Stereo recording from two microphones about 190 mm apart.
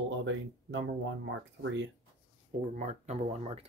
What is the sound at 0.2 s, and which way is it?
Speech, 75° right (ahead or behind).